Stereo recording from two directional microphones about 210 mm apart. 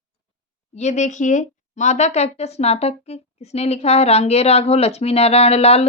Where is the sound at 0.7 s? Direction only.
35° left (ahead or behind).